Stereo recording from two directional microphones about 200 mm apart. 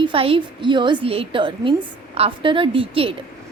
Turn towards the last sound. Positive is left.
turn(degrees=-25)  # may be behind; listen again after turning